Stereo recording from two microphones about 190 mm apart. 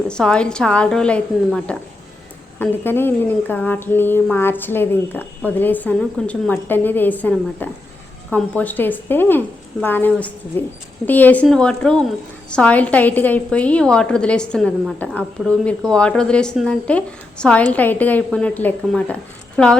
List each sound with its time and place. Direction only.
0.1 s a woman's voice: 5° left (ahead or behind)